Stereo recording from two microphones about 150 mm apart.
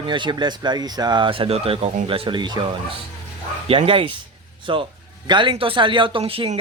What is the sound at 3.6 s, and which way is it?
Speech, 35° right (ahead or behind).